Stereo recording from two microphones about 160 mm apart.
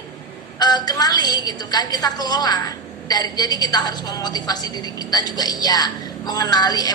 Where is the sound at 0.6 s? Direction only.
25° left (ahead or behind).